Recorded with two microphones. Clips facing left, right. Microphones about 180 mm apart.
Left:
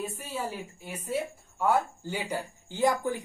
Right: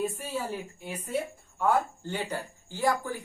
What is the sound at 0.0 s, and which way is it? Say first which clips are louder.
Speech: right 3 dB; 10° left (ahead or behind).